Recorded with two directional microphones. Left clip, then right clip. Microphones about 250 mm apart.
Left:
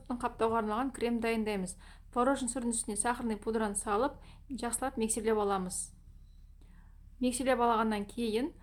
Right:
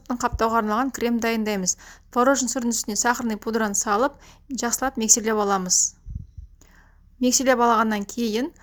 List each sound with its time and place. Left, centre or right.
0.1 s a woman's voice: right
7.2 s a woman's voice: right